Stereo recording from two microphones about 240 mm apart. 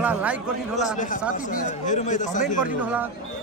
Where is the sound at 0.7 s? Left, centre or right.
Left.